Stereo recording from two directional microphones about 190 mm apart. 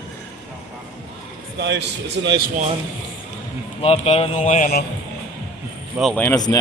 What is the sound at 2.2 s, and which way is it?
Speech, 80° right.